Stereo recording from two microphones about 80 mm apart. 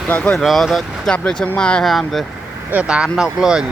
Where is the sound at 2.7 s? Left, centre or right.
Centre.